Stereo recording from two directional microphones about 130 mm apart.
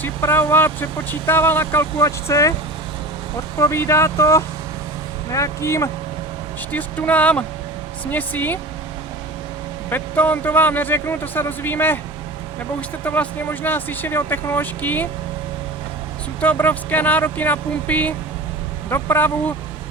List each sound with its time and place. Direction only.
0.0 s speech: 15° left (ahead or behind)
3.6 s speech: 20° left (ahead or behind)
6.7 s speech: 10° left (ahead or behind)
9.9 s speech: 15° left (ahead or behind)
13.1 s speech: 15° left (ahead or behind)
16.4 s speech: 15° left (ahead or behind)